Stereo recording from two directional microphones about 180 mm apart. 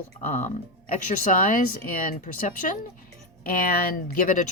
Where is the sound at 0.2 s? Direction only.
40° left (ahead or behind).